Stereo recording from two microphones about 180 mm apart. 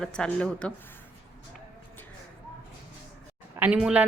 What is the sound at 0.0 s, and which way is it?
Speech, 5° left (ahead or behind).